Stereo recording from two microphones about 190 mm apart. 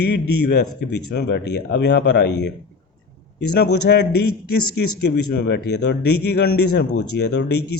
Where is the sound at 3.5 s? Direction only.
65° left (ahead or behind).